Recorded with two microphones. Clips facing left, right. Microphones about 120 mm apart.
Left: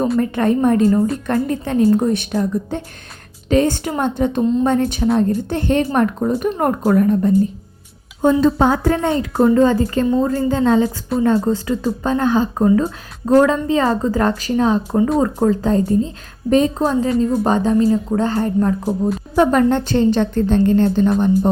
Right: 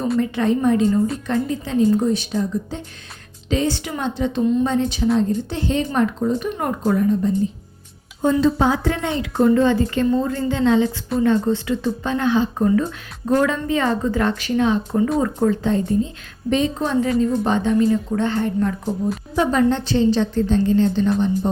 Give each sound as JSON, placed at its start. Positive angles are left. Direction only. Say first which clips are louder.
{"t": 0.2, "sound": "a woman's voice", "louder": "left 3 dB", "side_deg": 50}
{"t": 8.4, "sound": "a woman's voice", "louder": "left 3 dB", "side_deg": 50}
{"t": 19.4, "sound": "a woman's voice", "louder": "left 4 dB", "side_deg": 50}